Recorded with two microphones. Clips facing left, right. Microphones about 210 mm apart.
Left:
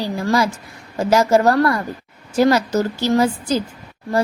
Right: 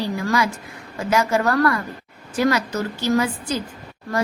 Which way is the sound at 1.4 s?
30° left (ahead or behind).